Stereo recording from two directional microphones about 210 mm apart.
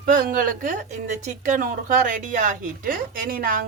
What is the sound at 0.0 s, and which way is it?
Speech, 40° right (ahead or behind).